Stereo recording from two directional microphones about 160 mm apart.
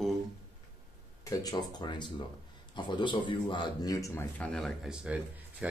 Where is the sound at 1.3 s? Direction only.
25° left (ahead or behind).